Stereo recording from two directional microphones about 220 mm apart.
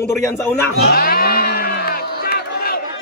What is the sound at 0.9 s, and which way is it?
Crowd, 40° left (ahead or behind).